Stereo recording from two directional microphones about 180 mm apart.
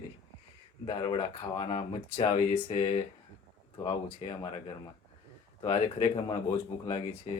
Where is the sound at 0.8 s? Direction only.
30° left (ahead or behind).